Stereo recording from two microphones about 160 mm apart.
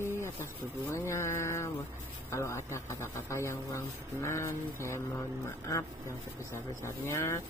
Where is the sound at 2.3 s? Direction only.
15° left (ahead or behind).